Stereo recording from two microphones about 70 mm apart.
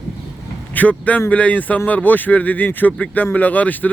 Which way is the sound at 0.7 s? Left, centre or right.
Left.